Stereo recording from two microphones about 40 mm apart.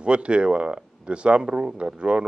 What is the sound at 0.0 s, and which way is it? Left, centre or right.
A man's voice, right.